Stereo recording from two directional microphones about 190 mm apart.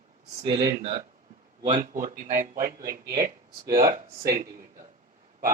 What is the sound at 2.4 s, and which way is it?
Speech, 45° right (ahead or behind).